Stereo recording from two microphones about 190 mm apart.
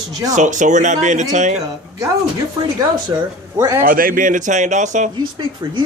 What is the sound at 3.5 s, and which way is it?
Speech, 15° right (ahead or behind).